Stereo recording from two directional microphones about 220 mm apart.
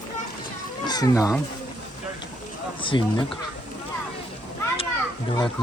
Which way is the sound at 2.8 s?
20° left (ahead or behind).